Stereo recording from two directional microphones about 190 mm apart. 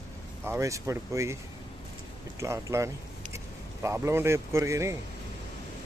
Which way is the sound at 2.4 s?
15° right (ahead or behind).